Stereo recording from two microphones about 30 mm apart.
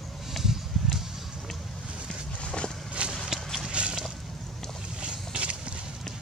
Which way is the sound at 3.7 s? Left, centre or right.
Right.